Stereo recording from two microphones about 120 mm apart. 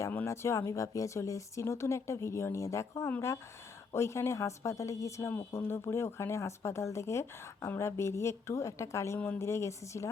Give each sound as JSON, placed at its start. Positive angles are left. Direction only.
{"t": 0.0, "sound": "speech", "side_deg": 20}